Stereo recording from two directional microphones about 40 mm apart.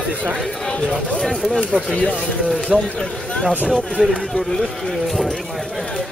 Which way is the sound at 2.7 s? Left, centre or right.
Centre.